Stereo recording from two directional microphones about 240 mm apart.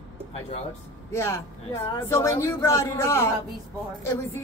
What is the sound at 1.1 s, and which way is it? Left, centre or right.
A woman's voice, centre.